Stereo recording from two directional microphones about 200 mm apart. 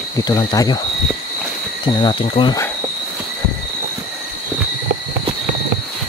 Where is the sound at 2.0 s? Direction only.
25° left (ahead or behind).